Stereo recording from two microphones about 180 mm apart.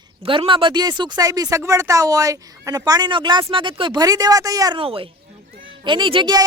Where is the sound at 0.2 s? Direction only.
30° right (ahead or behind).